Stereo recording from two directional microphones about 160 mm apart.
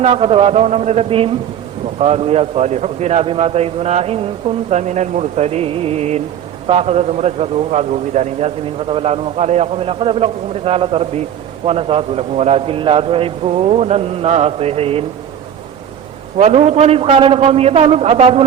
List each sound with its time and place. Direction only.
0.0 s a man's voice: 40° right (ahead or behind)
16.4 s a man's voice: 45° right (ahead or behind)